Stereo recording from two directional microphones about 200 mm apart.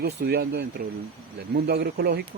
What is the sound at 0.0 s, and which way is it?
Speech, 50° right (ahead or behind).